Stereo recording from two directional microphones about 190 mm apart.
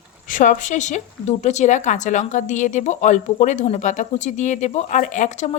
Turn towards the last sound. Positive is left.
turn(degrees=40)  # may be behind; listen again after turning